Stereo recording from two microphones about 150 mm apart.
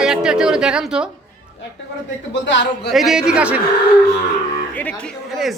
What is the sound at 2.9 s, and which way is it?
Speech, 5° right (ahead or behind).